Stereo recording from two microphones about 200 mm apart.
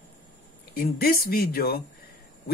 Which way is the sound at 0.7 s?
50° left (ahead or behind).